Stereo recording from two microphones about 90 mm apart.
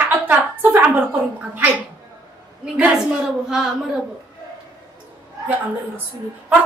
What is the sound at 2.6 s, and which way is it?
A woman's voice, 5° right (ahead or behind).